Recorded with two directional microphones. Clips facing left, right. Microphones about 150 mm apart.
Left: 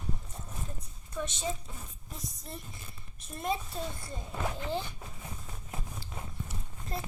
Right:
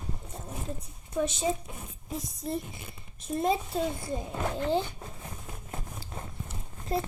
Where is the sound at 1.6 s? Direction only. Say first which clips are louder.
Right 4 dB; 15° right (ahead or behind).